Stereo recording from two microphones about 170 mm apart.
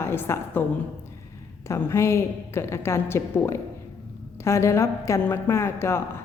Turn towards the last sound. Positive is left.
turn(degrees=15)  # may be behind; listen again after turning